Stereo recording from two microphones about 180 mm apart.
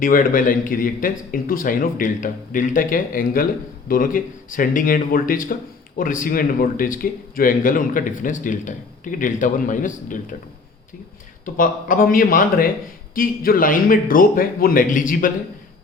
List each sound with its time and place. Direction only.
0.0 s speech: 50° left (ahead or behind)
11.4 s speech: 50° left (ahead or behind)